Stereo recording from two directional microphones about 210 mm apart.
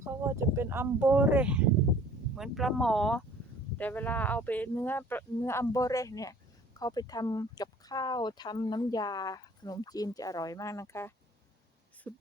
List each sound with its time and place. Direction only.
0.0 s speech: 15° right (ahead or behind); by 12.2 s 10° left (ahead or behind)